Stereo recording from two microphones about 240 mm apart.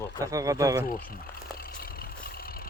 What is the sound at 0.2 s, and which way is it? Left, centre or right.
Speech, centre.